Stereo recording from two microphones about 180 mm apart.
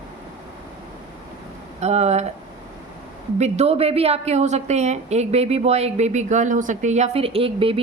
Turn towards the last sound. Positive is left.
turn(degrees=-30)  # may be behind; listen again after turning